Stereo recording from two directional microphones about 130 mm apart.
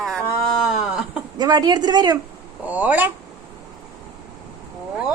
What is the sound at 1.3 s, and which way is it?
Speech, 30° right (ahead or behind).